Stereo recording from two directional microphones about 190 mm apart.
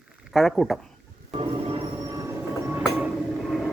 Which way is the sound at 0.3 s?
Centre (ahead or behind).